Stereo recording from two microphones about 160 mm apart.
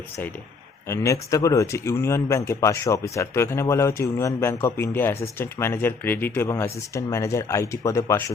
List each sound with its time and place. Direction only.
0.9 s speech: 20° left (ahead or behind)